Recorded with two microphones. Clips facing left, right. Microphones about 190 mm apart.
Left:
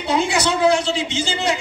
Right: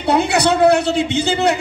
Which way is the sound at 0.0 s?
65° right (ahead or behind).